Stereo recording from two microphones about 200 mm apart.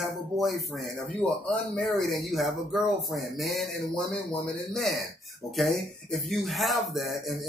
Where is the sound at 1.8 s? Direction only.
Centre (ahead or behind).